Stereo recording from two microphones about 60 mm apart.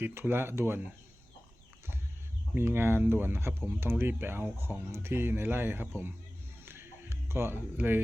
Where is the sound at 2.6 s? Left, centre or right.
Right.